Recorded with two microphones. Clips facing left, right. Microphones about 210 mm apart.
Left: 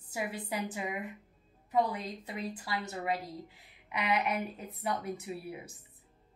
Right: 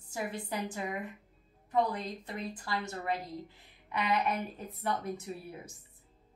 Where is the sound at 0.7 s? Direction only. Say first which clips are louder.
Even; 10° left (ahead or behind).